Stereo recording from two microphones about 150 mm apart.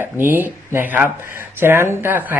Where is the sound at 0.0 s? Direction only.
15° right (ahead or behind).